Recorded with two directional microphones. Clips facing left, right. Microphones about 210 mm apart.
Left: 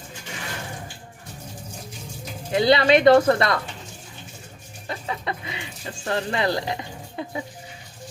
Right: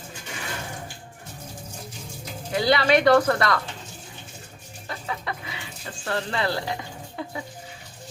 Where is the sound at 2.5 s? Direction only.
20° left (ahead or behind).